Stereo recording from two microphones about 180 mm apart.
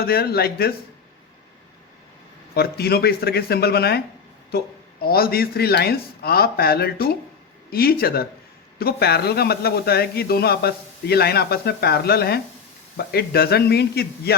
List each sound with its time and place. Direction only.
0.0 s speech: 60° left (ahead or behind)
2.6 s speech: 60° left (ahead or behind)